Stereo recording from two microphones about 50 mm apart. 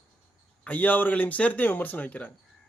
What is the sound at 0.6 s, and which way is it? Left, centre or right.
Speech, left.